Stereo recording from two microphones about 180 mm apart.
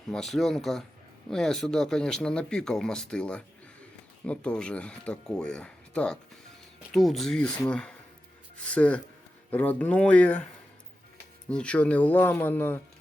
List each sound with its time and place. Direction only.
0.1 s speech: centre (ahead or behind)